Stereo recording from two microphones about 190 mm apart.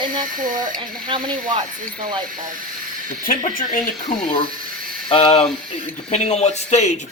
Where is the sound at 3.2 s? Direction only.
45° left (ahead or behind).